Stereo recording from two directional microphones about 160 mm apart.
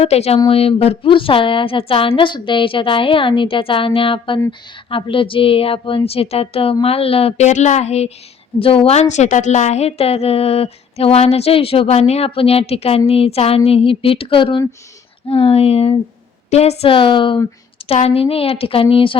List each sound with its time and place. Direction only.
0.0 s a woman's voice: 40° left (ahead or behind)